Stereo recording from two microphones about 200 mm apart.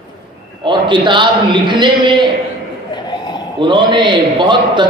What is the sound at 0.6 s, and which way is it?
A man's voice, 25° right (ahead or behind).